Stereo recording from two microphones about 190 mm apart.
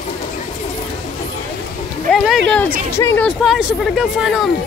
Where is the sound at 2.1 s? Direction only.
Centre (ahead or behind).